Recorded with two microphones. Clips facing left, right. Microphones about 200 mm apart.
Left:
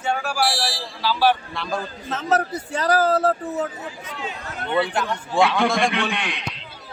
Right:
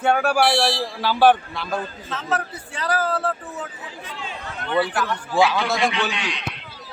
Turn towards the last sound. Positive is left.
turn(degrees=55)  # may be behind; listen again after turning